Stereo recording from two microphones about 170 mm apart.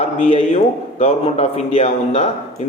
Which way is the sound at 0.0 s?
45° left (ahead or behind).